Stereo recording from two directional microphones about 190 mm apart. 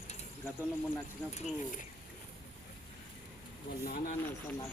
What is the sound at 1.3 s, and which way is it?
Speech, 35° left (ahead or behind).